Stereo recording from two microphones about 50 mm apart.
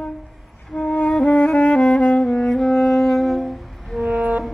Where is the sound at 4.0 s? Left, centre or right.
Right.